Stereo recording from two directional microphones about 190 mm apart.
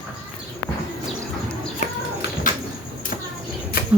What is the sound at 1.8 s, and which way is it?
Bird, 40° left (ahead or behind).